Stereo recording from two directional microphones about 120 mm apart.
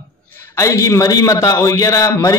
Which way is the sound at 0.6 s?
25° left (ahead or behind).